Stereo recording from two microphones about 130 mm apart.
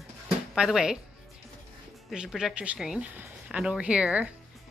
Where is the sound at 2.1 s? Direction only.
5° right (ahead or behind).